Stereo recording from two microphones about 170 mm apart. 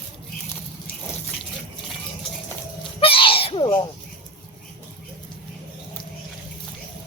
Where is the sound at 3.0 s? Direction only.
30° left (ahead or behind).